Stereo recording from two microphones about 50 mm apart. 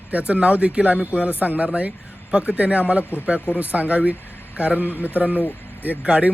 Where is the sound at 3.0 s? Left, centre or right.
Left.